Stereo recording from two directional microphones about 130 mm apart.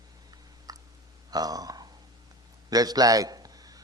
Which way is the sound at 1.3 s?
30° right (ahead or behind).